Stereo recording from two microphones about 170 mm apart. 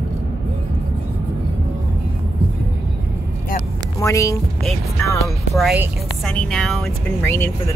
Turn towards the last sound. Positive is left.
turn(degrees=15)  # may be behind; listen again after turning